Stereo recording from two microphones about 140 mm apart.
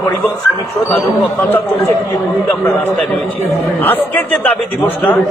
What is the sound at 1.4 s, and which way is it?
Speech, 15° left (ahead or behind).